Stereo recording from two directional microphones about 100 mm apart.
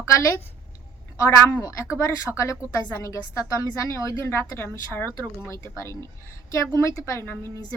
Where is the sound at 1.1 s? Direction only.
30° left (ahead or behind).